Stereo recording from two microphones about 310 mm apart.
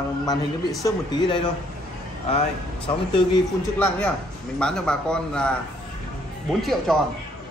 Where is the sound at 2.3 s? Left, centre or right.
Centre.